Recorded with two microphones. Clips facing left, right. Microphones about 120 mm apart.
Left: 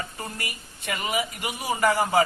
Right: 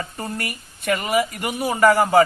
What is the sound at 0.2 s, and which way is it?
Speech, 50° right (ahead or behind).